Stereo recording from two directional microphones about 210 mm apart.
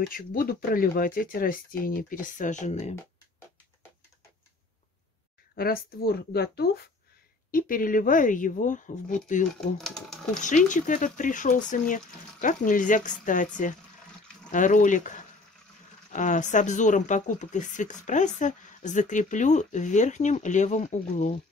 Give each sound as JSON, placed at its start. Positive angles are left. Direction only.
{"t": 0.1, "sound": "speech", "side_deg": 40}
{"t": 5.6, "sound": "speech", "side_deg": 45}
{"t": 9.6, "sound": "speech", "side_deg": 0}
{"t": 10.4, "sound": "speech", "side_deg": 35}
{"t": 14.5, "sound": "speech", "side_deg": 40}